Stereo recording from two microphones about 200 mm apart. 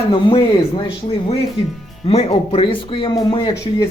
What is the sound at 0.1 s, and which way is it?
Speech, 25° left (ahead or behind).